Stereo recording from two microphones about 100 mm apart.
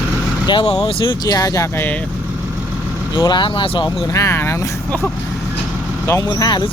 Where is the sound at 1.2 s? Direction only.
35° left (ahead or behind).